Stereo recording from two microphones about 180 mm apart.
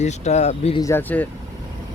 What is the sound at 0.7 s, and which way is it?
Speech, 15° left (ahead or behind).